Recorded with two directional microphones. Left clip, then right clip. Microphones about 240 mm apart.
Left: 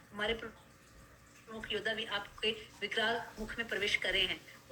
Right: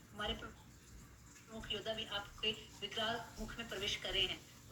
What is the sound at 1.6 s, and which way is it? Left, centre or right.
A woman's voice, left.